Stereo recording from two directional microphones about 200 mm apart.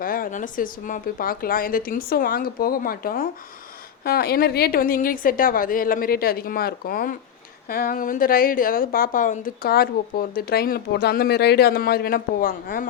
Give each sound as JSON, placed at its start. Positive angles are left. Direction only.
{"t": 0.0, "sound": "a woman's voice", "side_deg": 45}